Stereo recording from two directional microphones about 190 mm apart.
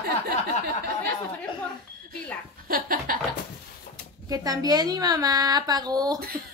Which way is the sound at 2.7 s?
50° right (ahead or behind).